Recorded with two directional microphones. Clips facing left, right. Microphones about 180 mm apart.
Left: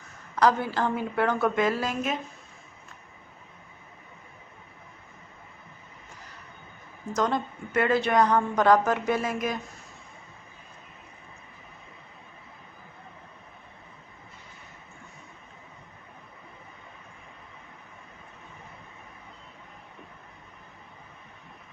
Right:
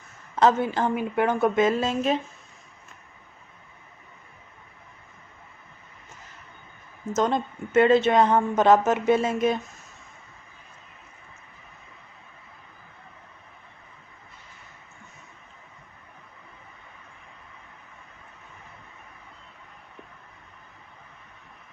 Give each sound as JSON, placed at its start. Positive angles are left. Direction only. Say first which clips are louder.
{"t": 0.3, "sound": "a woman's voice", "louder": "right 2 dB", "side_deg": -25}
{"t": 7.1, "sound": "a woman's voice", "louder": "right 3 dB", "side_deg": -20}